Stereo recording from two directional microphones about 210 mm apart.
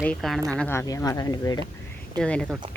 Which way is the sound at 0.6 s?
10° left (ahead or behind).